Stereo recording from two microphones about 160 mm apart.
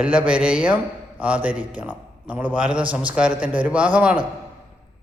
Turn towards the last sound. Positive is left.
turn(degrees=-10)  # may be behind; listen again after turning